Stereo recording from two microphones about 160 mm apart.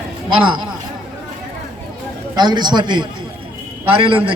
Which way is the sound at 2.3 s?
25° right (ahead or behind).